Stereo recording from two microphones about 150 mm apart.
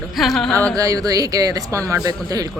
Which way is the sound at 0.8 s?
25° right (ahead or behind).